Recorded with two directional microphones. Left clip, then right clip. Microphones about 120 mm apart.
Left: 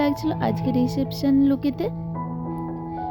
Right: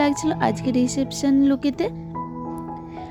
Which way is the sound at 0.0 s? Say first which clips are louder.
Right 3 dB; 30° right (ahead or behind).